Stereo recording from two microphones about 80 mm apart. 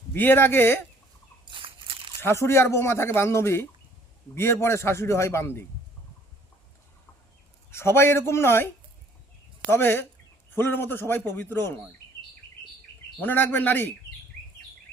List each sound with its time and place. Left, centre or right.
0.1 s a man's voice: left
1.5 s a sound: right
2.2 s speech: left
7.7 s speech: left
9.7 s a man's voice: left
13.2 s a man's voice: left